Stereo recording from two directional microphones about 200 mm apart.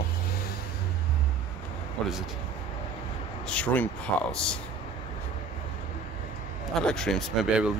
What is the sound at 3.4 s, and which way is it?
Speech, 5° left (ahead or behind).